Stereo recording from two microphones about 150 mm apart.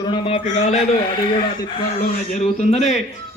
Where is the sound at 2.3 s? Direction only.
50° left (ahead or behind).